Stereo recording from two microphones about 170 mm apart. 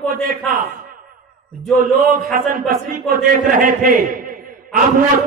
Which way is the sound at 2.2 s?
60° right (ahead or behind).